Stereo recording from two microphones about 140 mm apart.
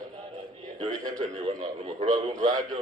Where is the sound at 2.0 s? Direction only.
40° right (ahead or behind).